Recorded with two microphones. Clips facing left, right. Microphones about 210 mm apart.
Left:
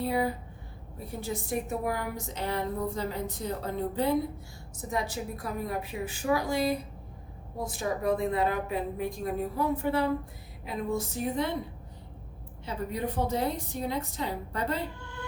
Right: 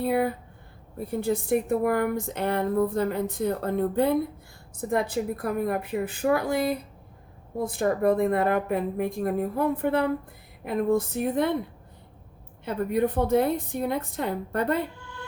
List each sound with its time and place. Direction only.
0.0 s a woman's voice: 60° right (ahead or behind)
12.6 s a woman's voice: 55° right (ahead or behind)